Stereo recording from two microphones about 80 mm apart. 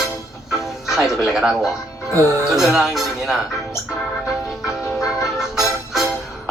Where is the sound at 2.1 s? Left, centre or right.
Right.